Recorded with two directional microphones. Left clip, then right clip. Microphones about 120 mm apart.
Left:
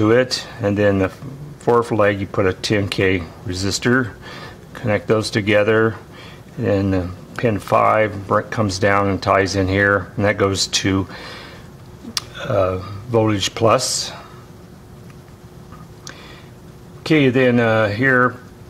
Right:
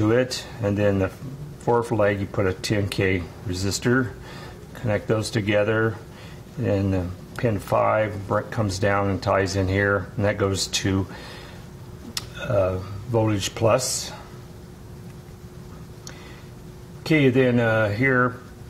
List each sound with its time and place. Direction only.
0.0 s speech: 25° left (ahead or behind)
17.0 s speech: 25° left (ahead or behind)